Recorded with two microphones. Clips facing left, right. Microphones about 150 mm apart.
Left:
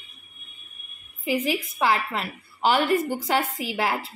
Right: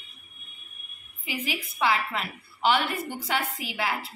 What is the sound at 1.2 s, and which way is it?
A woman's voice, 40° left (ahead or behind).